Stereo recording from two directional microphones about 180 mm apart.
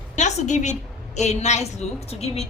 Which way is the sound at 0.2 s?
40° left (ahead or behind).